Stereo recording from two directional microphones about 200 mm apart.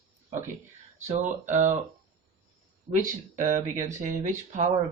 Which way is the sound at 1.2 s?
40° right (ahead or behind).